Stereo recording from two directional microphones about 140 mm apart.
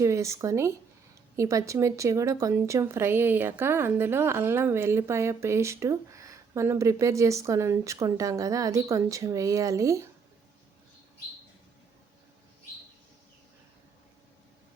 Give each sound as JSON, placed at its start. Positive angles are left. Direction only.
{"t": 0.0, "sound": "a woman's voice", "side_deg": -20}